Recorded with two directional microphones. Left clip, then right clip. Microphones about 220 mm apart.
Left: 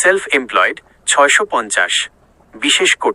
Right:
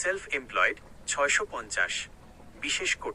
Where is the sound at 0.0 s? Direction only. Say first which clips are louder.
Left 17 dB; 45° left (ahead or behind).